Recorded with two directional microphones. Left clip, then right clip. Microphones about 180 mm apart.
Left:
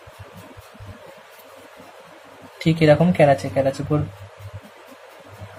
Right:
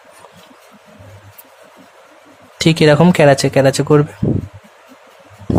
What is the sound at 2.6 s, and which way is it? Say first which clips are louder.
Speech: right 5 dB; 55° right (ahead or behind).